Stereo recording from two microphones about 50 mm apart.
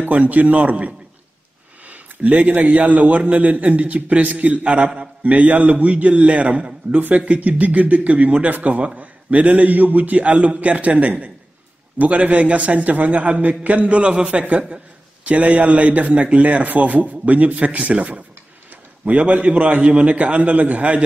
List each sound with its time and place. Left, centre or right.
0.0 s a man's voice: right